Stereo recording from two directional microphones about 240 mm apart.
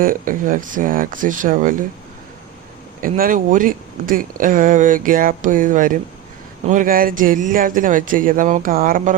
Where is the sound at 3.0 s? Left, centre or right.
Right.